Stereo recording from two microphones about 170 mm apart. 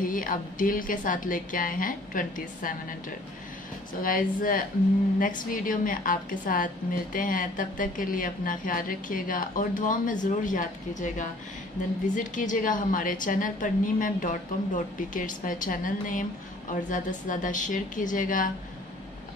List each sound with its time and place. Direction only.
0.0 s a woman's voice: 55° left (ahead or behind)
4.0 s a woman's voice: 55° left (ahead or behind)